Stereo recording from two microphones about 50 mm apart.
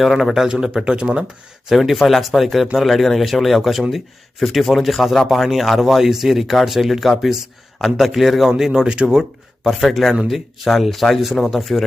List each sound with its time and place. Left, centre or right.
0.0 s speech: centre
0.9 s speech: right
1.7 s speech: centre
8.4 s speech: centre
9.6 s speech: centre